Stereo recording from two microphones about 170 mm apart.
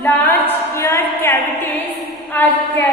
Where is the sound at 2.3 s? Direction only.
10° left (ahead or behind).